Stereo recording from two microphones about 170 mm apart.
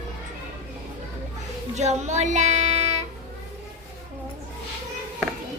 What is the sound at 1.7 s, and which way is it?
Music, 40° right (ahead or behind).